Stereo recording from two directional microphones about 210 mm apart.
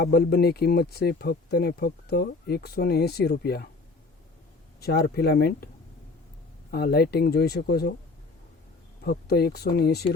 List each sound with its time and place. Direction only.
0.0 s speech: 45° left (ahead or behind)
4.8 s speech: 45° left (ahead or behind)
6.7 s speech: 50° left (ahead or behind)
9.0 s speech: 50° left (ahead or behind)